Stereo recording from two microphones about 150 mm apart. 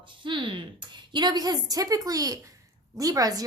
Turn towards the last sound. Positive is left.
turn(degrees=-25)  # may be behind; listen again after turning